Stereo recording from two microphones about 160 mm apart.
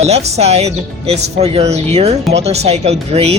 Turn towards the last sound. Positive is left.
turn(degrees=-40)  # may be behind; listen again after turning